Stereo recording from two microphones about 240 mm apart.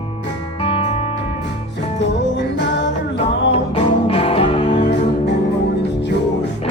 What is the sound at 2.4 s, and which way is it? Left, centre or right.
Music, left.